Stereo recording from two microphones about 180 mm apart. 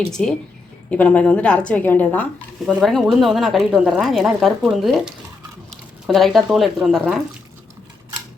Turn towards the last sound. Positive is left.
turn(degrees=0)  # may be behind; listen again after turning